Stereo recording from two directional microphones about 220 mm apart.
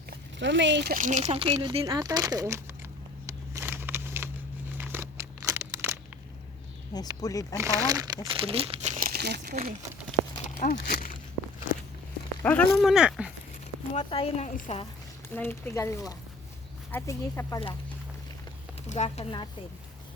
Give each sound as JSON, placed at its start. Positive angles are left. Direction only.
{"t": 0.1, "sound": "speech", "side_deg": -55}
{"t": 3.2, "sound": "a sound", "side_deg": -10}
{"t": 4.8, "sound": "crumpling", "side_deg": -10}
{"t": 6.9, "sound": "speech", "side_deg": 15}
{"t": 7.6, "sound": "speech", "side_deg": -15}
{"t": 10.6, "sound": "speech", "side_deg": 40}
{"t": 12.4, "sound": "speech", "side_deg": 5}
{"t": 13.9, "sound": "speech", "side_deg": 25}
{"t": 15.4, "sound": "speech", "side_deg": 10}
{"t": 18.9, "sound": "speech", "side_deg": 30}